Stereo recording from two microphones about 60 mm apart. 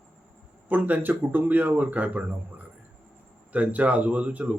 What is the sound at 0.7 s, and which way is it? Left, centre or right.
Speech, right.